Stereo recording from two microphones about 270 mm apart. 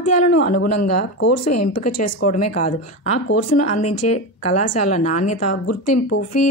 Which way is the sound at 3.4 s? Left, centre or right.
Left.